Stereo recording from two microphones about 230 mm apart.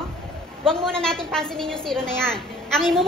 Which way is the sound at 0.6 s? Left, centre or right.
Centre.